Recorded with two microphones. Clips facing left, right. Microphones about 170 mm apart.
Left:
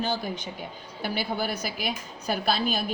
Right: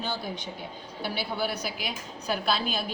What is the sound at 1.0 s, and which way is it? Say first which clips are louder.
Speech: left 2 dB; 45° left (ahead or behind).